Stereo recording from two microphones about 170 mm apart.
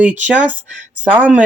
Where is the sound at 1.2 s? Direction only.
10° right (ahead or behind).